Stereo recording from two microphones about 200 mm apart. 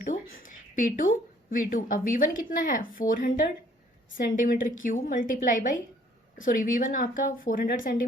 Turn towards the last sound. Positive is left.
turn(degrees=45)  # may be behind; listen again after turning